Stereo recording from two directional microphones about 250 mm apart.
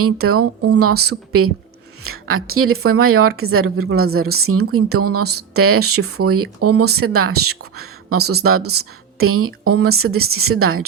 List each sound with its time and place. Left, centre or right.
0.0 s speech: right
8.2 s speech: right
9.1 s speech: right